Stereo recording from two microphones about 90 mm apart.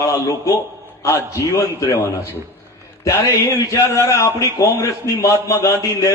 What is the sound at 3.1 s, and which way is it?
A man's voice, 35° left (ahead or behind).